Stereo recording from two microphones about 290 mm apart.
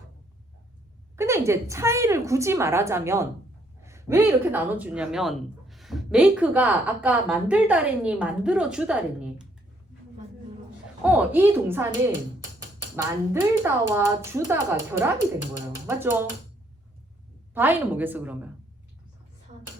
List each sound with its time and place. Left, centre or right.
1.1 s a woman's voice: centre
11.0 s a woman's voice: centre
13.0 s a woman's voice: centre
17.5 s a woman's voice: centre
19.5 s a sound: right